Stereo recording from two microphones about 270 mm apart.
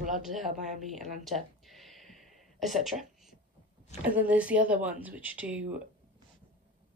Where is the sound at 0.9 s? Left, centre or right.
Centre.